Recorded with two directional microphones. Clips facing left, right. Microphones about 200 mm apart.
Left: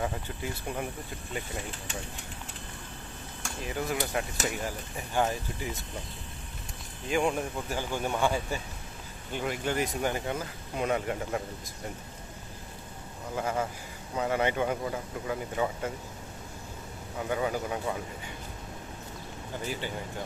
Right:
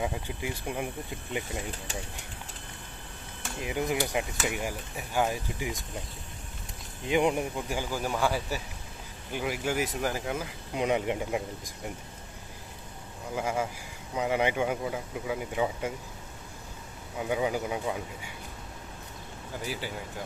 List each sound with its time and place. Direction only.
0.0 s speech: 10° right (ahead or behind)
3.6 s speech: 15° right (ahead or behind)
7.1 s speech: 15° right (ahead or behind)
13.3 s speech: 10° right (ahead or behind)
17.2 s speech: 10° right (ahead or behind)
19.6 s speech: 5° right (ahead or behind)